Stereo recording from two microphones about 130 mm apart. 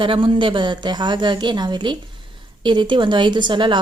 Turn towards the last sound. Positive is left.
turn(degrees=-40)  # may be behind; listen again after turning